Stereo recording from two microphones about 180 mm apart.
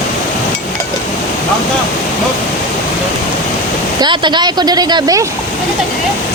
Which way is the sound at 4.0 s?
25° right (ahead or behind).